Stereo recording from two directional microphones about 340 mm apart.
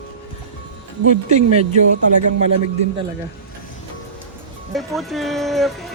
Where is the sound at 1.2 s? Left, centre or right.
Centre.